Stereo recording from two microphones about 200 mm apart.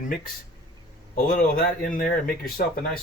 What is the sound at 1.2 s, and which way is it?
Speech, 40° left (ahead or behind).